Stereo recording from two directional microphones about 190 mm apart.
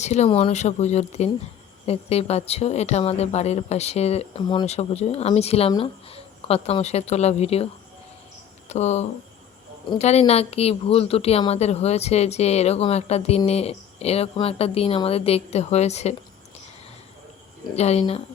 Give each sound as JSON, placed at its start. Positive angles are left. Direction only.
{"t": 0.0, "sound": "a woman's voice", "side_deg": 35}
{"t": 8.7, "sound": "a woman's voice", "side_deg": 35}
{"t": 17.7, "sound": "a woman's voice", "side_deg": 35}